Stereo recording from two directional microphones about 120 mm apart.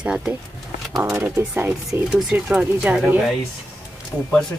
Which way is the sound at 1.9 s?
Centre (ahead or behind).